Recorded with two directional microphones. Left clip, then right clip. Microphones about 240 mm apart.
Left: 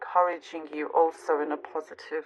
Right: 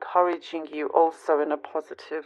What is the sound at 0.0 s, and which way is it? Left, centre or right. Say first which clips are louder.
Speech: right 2 dB; right.